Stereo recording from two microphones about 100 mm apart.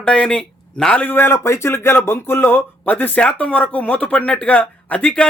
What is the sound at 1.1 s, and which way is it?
Speech, 25° left (ahead or behind).